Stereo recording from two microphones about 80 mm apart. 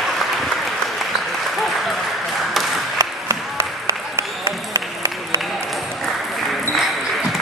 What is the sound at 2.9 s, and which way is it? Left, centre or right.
Applause, right.